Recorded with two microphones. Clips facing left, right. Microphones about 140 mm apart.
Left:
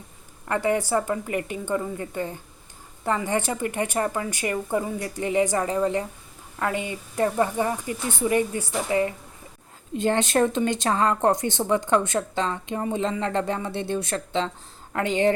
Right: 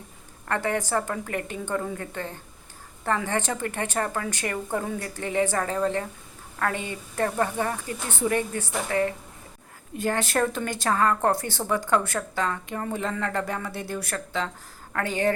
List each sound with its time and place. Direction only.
0.4 s a woman's voice: 10° left (ahead or behind)